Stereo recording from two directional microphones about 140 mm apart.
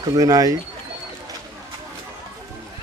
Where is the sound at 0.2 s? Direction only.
25° right (ahead or behind).